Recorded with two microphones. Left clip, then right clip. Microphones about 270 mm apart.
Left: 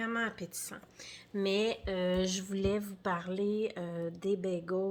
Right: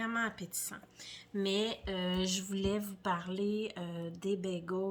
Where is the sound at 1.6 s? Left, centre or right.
Right.